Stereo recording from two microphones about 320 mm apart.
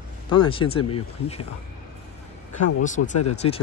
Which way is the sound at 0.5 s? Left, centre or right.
Centre.